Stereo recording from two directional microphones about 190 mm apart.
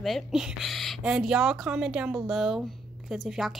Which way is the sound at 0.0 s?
Centre (ahead or behind).